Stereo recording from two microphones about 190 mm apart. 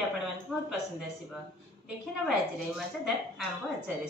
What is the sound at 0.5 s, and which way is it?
Speech, 5° left (ahead or behind).